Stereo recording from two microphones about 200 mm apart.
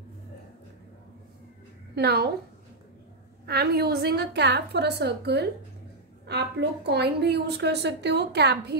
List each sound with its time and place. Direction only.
2.0 s a woman's voice: 50° right (ahead or behind)
3.4 s a woman's voice: 55° right (ahead or behind)